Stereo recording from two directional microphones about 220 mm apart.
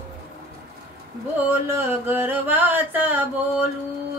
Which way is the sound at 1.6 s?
10° right (ahead or behind).